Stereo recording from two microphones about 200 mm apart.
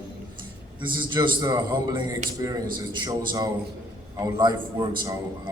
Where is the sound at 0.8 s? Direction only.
25° right (ahead or behind).